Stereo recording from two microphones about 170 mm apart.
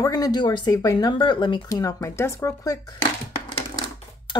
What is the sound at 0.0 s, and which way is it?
Speech, 20° left (ahead or behind).